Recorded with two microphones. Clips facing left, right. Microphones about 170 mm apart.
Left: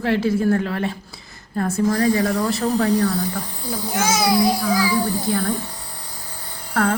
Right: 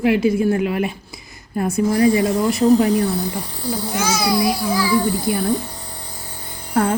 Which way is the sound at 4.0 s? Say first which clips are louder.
Left 2 dB; 20° left (ahead or behind).